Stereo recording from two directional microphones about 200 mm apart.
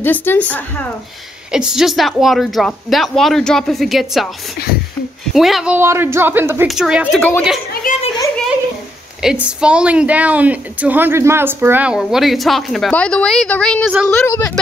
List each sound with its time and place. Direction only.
0.0 s a woman's voice: 10° left (ahead or behind)
1.5 s a woman's voice: 5° right (ahead or behind)
5.3 s a woman's voice: centre (ahead or behind)
5.8 s a woman's voice: 10° right (ahead or behind); by 7.4 s 5° left (ahead or behind)
7.8 s a sound: 45° left (ahead or behind)
9.2 s a woman's voice: 5° right (ahead or behind); by 14.5 s 15° left (ahead or behind)